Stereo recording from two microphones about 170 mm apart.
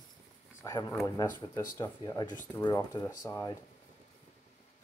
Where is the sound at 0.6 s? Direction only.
20° left (ahead or behind).